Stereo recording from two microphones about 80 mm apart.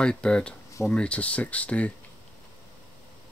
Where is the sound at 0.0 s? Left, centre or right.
Centre.